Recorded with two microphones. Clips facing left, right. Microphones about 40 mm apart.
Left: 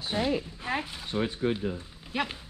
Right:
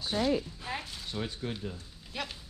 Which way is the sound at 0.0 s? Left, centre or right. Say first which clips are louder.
Left 1 dB; left.